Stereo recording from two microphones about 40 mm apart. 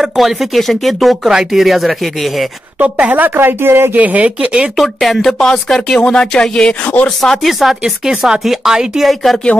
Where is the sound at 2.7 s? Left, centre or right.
Right.